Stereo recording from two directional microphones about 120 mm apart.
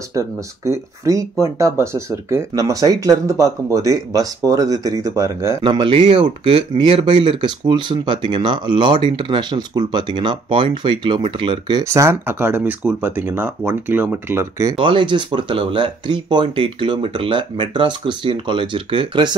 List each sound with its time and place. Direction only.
0.7 s speech: 25° right (ahead or behind)
5.6 s speech: 40° right (ahead or behind)
11.8 s speech: 25° right (ahead or behind)
14.8 s speech: 45° right (ahead or behind)